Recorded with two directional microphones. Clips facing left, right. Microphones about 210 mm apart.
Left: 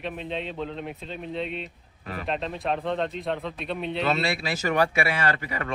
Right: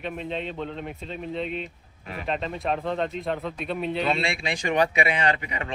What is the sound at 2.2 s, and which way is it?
A man's voice, centre (ahead or behind).